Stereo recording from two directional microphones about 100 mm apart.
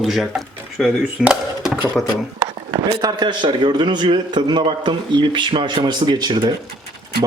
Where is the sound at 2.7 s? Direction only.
45° right (ahead or behind).